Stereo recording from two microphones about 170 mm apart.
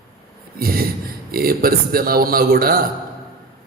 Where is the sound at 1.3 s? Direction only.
60° right (ahead or behind).